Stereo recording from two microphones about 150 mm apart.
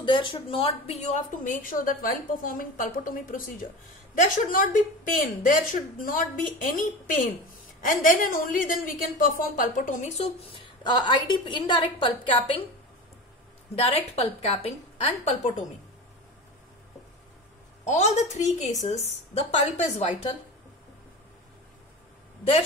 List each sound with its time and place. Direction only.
0.0 s a woman's voice: 35° left (ahead or behind)
13.7 s a woman's voice: 40° left (ahead or behind)
17.8 s a woman's voice: 50° left (ahead or behind)